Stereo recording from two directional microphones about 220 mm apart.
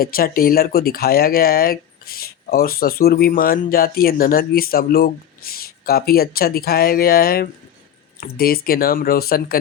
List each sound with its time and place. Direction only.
0.0 s speech: 40° left (ahead or behind)